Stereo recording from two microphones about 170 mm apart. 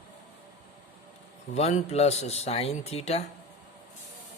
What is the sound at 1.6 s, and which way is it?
Speech, 40° left (ahead or behind).